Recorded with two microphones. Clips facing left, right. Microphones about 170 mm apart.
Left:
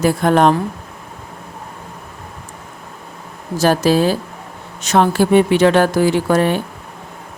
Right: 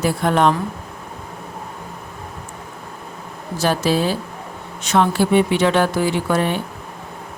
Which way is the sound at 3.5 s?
45° left (ahead or behind).